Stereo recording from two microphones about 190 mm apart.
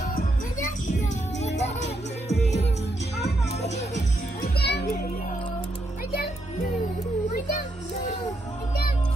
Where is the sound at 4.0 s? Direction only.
60° left (ahead or behind).